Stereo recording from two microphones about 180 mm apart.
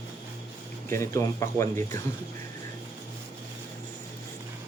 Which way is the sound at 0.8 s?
15° left (ahead or behind).